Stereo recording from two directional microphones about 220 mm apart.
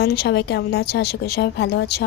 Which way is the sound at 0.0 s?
45° left (ahead or behind).